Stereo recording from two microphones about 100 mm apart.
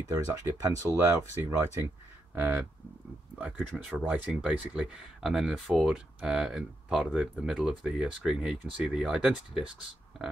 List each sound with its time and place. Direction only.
0.1 s speech: 30° right (ahead or behind); by 10.2 s 5° right (ahead or behind)